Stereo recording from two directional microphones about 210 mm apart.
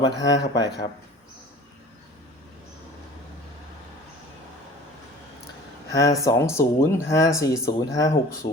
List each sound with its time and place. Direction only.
0.0 s speech: 15° left (ahead or behind)
5.9 s speech: 15° left (ahead or behind)